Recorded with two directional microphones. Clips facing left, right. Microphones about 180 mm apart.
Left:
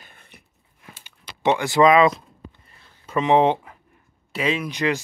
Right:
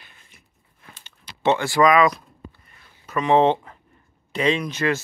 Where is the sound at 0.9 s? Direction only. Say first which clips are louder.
Left 2 dB; 10° left (ahead or behind).